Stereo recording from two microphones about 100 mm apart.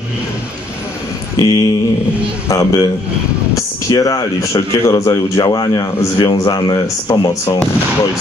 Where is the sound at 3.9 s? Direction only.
35° left (ahead or behind).